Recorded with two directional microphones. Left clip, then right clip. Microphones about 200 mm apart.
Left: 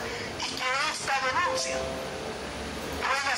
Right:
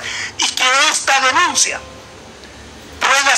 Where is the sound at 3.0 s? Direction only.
50° right (ahead or behind).